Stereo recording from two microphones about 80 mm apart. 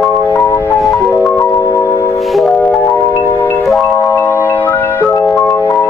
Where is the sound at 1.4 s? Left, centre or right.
Left.